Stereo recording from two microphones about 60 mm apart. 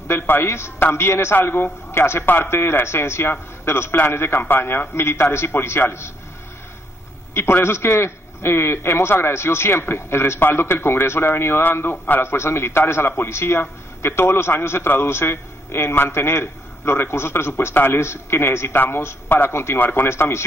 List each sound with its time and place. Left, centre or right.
0.1 s a man's voice: left
7.6 s a man's voice: left